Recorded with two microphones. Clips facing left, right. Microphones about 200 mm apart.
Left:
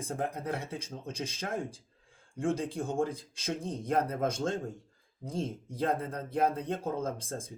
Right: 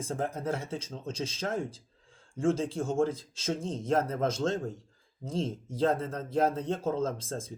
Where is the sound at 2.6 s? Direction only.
15° left (ahead or behind).